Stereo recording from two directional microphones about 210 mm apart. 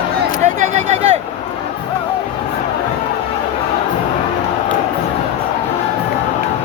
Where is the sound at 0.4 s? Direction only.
35° right (ahead or behind).